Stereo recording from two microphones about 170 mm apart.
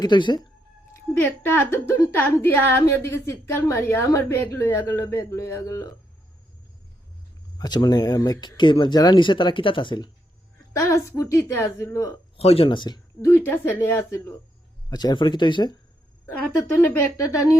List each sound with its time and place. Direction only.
0.0 s speech: 25° left (ahead or behind)
1.1 s a woman's voice: 10° left (ahead or behind)
7.6 s a woman's voice: 25° left (ahead or behind)
12.4 s speech: 35° left (ahead or behind)
13.2 s a woman's voice: 10° left (ahead or behind)
16.2 s a woman's voice: 10° left (ahead or behind)